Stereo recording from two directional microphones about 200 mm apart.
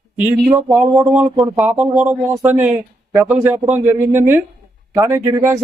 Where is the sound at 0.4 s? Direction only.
10° right (ahead or behind).